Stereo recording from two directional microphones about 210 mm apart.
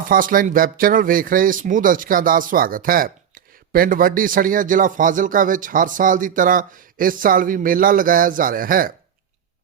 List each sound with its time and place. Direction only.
0.1 s speech: 40° right (ahead or behind)